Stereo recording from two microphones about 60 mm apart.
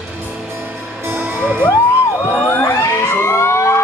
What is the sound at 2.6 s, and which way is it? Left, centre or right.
Emergency vehicle, left.